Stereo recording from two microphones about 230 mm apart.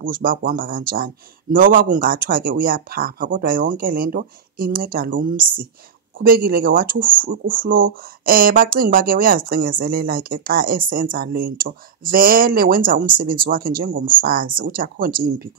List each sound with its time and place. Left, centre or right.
0.0 s speech: right